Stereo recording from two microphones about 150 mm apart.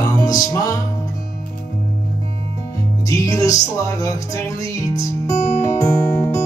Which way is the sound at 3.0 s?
20° left (ahead or behind).